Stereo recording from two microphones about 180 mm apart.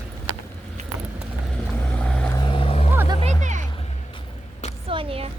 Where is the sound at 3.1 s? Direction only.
30° right (ahead or behind).